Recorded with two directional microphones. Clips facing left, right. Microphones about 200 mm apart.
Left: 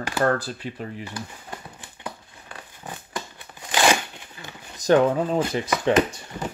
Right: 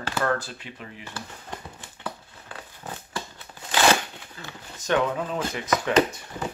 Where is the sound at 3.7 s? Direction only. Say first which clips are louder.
Even; 15° left (ahead or behind).